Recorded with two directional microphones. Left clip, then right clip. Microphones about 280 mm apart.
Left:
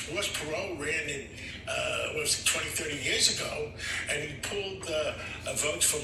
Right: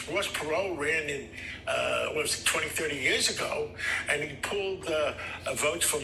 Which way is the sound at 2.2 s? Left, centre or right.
Centre.